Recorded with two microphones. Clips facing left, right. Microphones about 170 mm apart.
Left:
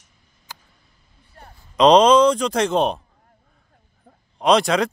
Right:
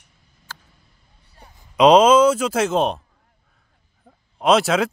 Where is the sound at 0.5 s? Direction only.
15° left (ahead or behind).